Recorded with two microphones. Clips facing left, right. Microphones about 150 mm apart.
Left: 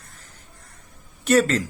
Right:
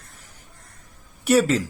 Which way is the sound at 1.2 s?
10° right (ahead or behind).